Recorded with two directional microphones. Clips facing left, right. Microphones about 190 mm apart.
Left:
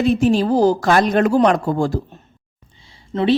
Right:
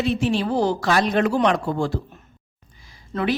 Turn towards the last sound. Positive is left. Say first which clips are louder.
# left 5 dB
turn(degrees=30)  # may be behind; listen again after turning